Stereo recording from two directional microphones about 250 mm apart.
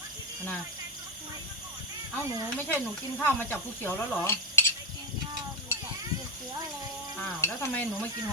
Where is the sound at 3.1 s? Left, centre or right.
Centre.